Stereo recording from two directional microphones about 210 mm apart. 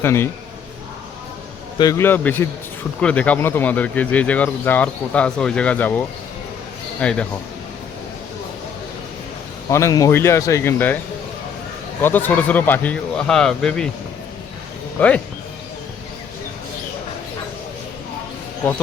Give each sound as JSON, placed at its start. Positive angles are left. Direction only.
{"t": 0.0, "sound": "speech", "side_deg": 10}
{"t": 1.8, "sound": "a man's voice", "side_deg": 15}
{"t": 9.6, "sound": "speech", "side_deg": 15}
{"t": 12.0, "sound": "speech", "side_deg": 10}
{"t": 15.0, "sound": "speech", "side_deg": 5}